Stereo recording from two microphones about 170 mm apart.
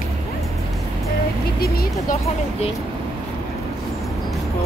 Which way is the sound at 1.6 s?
65° left (ahead or behind).